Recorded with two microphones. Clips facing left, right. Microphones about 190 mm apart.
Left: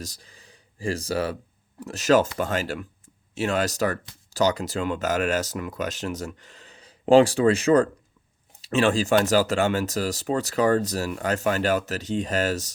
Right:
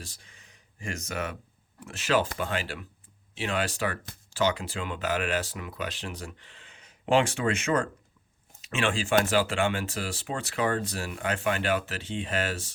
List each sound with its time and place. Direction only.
0.0 s speech: 35° left (ahead or behind)